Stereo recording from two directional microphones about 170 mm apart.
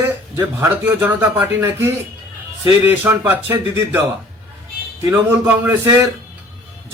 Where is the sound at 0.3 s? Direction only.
15° right (ahead or behind).